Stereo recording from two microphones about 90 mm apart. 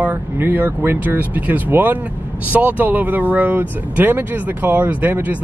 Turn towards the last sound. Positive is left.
turn(degrees=-20)  # may be behind; listen again after turning